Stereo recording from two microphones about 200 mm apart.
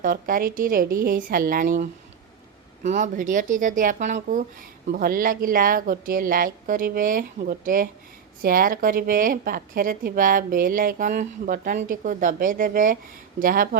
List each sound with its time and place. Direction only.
0.0 s a woman's voice: 45° right (ahead or behind)